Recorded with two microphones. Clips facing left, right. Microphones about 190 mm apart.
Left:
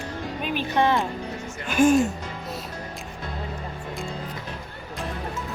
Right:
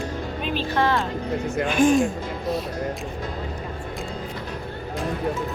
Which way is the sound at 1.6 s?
5° left (ahead or behind).